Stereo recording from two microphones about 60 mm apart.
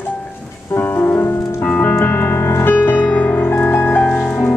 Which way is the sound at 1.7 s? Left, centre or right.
Left.